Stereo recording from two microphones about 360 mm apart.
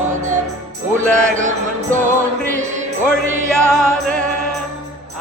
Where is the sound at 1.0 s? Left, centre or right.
Right.